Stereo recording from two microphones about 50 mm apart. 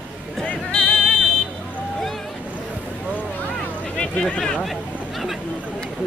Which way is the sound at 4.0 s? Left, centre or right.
Left.